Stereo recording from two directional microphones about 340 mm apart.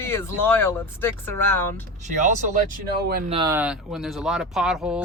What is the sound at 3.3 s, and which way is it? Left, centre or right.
Speech, centre.